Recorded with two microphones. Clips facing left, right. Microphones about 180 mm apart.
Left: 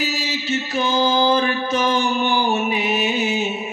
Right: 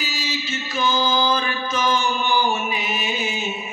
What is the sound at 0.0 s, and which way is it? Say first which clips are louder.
Mantra: left 4 dB; 65° left (ahead or behind).